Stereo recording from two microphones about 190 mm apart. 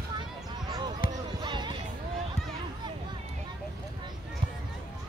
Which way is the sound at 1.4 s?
25° right (ahead or behind).